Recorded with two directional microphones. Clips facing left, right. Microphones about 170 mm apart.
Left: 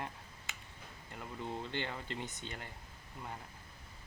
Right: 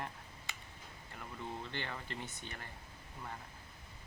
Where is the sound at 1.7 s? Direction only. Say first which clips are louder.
Left 3 dB; 20° left (ahead or behind).